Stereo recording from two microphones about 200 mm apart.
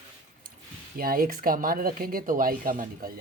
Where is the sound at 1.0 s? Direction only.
45° right (ahead or behind).